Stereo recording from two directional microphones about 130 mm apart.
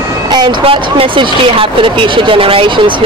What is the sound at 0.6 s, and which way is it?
Speech, 45° right (ahead or behind).